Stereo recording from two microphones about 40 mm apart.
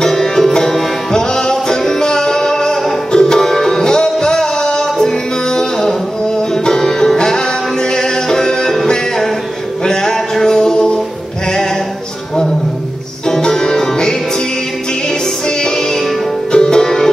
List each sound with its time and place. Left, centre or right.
0.0 s music: centre
13.4 s music: centre
15.4 s music: centre